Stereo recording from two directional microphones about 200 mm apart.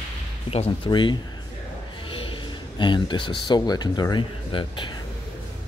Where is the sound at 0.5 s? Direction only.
30° left (ahead or behind).